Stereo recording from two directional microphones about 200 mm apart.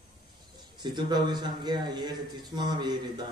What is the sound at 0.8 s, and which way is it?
A man's voice, 20° right (ahead or behind).